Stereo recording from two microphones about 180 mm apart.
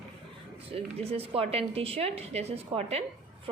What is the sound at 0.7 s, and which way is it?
Speech, 35° right (ahead or behind).